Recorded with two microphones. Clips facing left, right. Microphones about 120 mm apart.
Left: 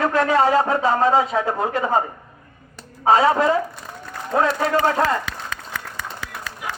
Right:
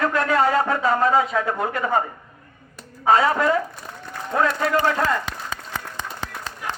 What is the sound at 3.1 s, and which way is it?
A man's voice, 25° left (ahead or behind).